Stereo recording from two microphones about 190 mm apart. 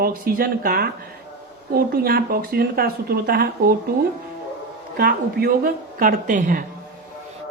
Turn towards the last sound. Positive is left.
turn(degrees=-45)  # may be behind; listen again after turning